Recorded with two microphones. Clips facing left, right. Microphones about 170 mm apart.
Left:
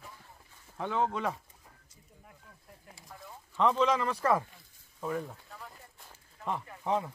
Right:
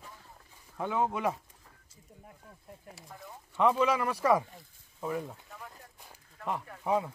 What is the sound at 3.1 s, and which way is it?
Speech, 10° right (ahead or behind).